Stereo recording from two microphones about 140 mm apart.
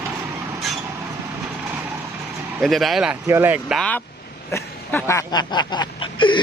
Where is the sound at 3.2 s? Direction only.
15° right (ahead or behind).